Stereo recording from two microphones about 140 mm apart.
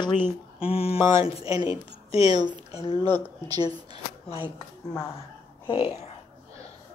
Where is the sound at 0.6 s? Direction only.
45° left (ahead or behind).